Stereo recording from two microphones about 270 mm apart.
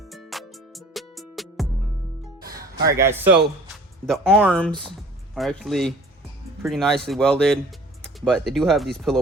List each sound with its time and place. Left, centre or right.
0.1 s music: centre
2.6 s a man's voice: centre